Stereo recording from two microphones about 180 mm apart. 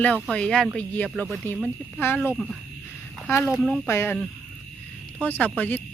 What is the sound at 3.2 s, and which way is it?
Speech, 15° left (ahead or behind).